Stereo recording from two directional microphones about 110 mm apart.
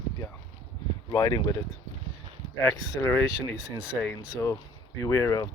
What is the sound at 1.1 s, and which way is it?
Speech, 35° left (ahead or behind).